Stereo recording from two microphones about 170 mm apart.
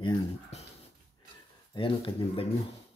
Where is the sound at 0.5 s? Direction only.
40° left (ahead or behind).